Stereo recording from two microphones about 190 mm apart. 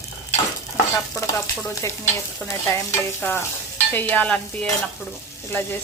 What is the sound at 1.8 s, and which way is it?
Stir, 15° left (ahead or behind).